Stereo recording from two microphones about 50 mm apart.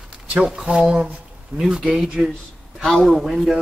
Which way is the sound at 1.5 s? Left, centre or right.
Centre.